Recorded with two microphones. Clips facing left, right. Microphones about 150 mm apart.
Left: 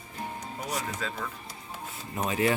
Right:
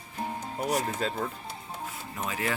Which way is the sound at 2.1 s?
25° left (ahead or behind).